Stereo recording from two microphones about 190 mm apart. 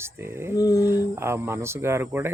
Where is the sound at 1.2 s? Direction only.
15° right (ahead or behind).